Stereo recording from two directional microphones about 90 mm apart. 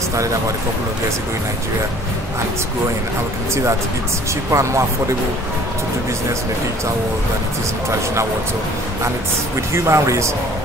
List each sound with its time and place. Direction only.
4.5 s speech: 35° right (ahead or behind)
9.8 s speech: 30° right (ahead or behind)